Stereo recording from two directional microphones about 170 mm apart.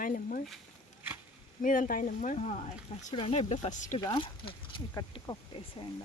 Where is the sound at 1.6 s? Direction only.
50° left (ahead or behind).